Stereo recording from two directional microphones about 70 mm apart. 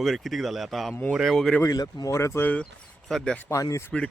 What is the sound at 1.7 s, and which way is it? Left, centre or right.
Speech, left.